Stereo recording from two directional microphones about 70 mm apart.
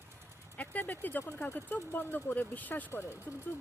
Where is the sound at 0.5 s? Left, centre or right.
Left.